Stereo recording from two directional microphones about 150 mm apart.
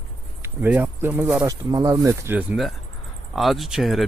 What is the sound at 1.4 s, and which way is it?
Speech, 25° right (ahead or behind).